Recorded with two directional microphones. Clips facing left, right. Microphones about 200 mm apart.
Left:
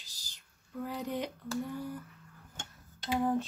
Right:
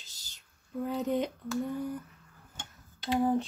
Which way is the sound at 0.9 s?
25° right (ahead or behind).